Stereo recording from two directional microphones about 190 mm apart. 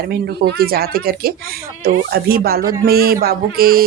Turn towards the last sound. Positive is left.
turn(degrees=-50)  # may be behind; listen again after turning